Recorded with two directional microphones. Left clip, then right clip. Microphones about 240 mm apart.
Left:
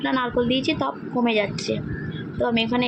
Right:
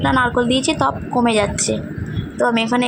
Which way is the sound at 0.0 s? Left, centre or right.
Centre.